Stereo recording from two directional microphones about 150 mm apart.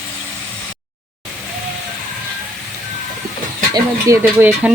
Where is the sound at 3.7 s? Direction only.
15° right (ahead or behind).